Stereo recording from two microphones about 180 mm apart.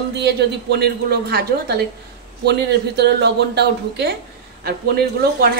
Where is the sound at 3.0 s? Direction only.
70° right (ahead or behind).